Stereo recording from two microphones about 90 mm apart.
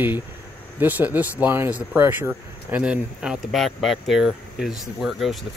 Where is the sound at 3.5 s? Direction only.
Centre (ahead or behind).